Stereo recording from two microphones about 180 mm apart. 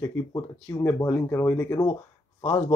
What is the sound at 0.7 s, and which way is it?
Speech, 15° left (ahead or behind).